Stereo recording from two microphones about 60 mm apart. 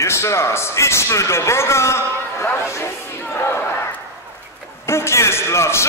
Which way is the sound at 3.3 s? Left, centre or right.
Left.